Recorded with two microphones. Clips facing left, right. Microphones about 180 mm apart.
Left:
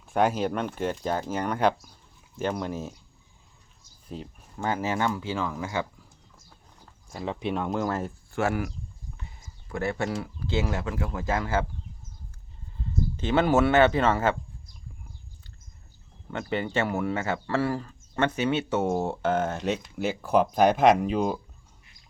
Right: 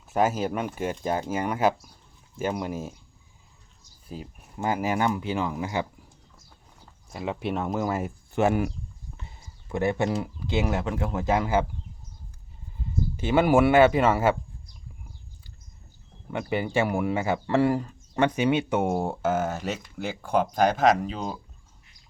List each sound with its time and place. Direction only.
0.1 s speech: 5° right (ahead or behind)
4.1 s speech: 10° right (ahead or behind)
7.1 s speech: 5° right (ahead or behind)
8.3 s speech: 20° right (ahead or behind)
9.7 s speech: 20° right (ahead or behind)
13.1 s speech: 10° right (ahead or behind)
16.3 s speech: 10° right (ahead or behind); by 21.3 s 10° left (ahead or behind)